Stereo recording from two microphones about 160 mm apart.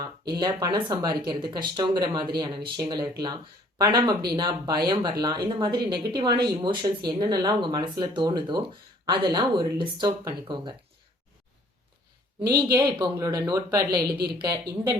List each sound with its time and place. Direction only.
0.0 s speech: 25° right (ahead or behind)
12.5 s speech: 30° right (ahead or behind)